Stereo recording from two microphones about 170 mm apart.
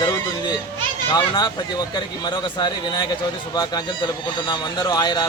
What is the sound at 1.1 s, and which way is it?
Speech, 25° left (ahead or behind).